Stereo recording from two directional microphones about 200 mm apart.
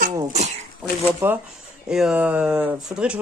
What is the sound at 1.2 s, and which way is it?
Speech, 10° right (ahead or behind).